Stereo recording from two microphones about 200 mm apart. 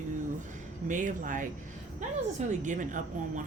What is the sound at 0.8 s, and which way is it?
Speech, 40° right (ahead or behind).